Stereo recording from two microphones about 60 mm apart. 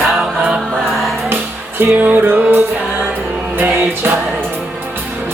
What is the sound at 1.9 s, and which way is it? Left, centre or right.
Music, right.